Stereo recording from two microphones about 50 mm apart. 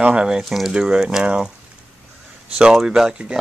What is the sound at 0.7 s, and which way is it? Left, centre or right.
Speech, centre.